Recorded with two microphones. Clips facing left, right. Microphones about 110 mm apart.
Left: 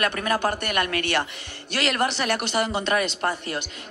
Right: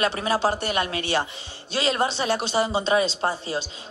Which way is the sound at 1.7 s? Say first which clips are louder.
Right 1 dB; 70° left (ahead or behind).